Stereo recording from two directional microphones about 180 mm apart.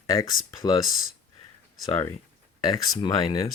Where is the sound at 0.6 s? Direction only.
20° left (ahead or behind).